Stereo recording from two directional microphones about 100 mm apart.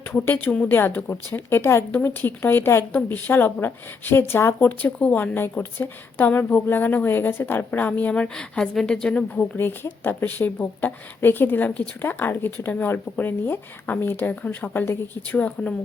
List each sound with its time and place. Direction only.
0.3 s a woman's voice: 20° left (ahead or behind)
4.9 s a woman's voice: 10° left (ahead or behind)